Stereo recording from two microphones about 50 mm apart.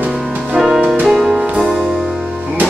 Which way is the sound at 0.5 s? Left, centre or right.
Centre.